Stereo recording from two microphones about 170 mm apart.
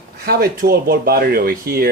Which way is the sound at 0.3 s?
60° right (ahead or behind).